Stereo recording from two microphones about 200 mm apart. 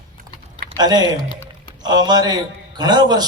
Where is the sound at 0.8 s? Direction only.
20° right (ahead or behind).